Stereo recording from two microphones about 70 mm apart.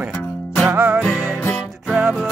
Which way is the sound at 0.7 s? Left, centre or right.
Right.